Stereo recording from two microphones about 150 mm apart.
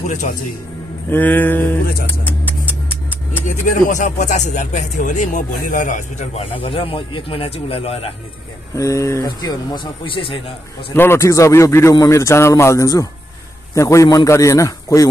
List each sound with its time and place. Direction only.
0.0 s a man's voice: 55° left (ahead or behind)
1.1 s a sound: 10° left (ahead or behind)
2.2 s vehicle: 15° left (ahead or behind)
3.4 s speech: 60° left (ahead or behind); by 8.1 s 40° left (ahead or behind)
8.7 s a man's voice: 20° left (ahead or behind)
10.9 s a man's voice: 15° left (ahead or behind)